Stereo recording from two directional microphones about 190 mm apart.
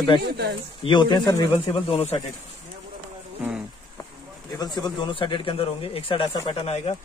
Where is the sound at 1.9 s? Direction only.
35° left (ahead or behind).